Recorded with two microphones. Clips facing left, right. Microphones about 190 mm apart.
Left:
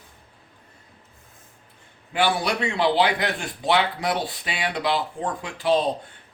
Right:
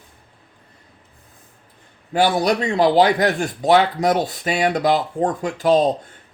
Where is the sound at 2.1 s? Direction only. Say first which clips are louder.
Right 6 dB; 40° right (ahead or behind).